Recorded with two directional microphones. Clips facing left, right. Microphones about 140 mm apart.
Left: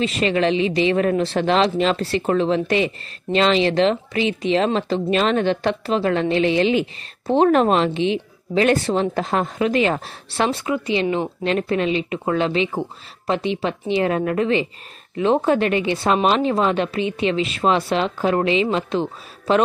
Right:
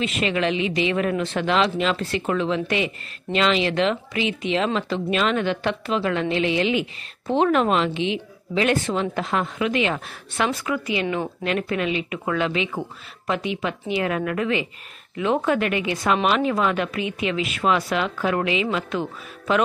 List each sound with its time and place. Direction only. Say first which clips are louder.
0.0 s speech: left 4 dB; 35° left (ahead or behind)